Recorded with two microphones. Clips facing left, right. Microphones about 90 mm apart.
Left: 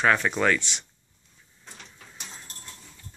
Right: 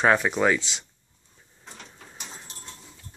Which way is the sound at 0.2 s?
15° right (ahead or behind).